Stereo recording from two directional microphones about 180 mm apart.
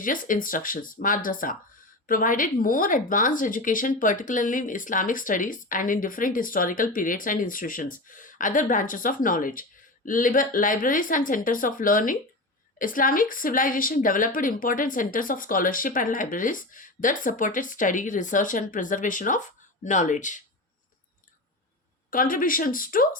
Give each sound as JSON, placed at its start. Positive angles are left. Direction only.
{"t": 0.0, "sound": "speech", "side_deg": 50}
{"t": 22.1, "sound": "speech", "side_deg": 50}